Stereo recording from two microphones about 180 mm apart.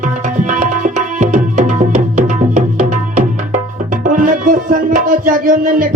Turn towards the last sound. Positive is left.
turn(degrees=-50)  # may be behind; listen again after turning